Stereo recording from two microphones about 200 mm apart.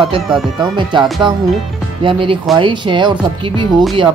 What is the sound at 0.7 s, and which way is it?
Speech, 20° right (ahead or behind).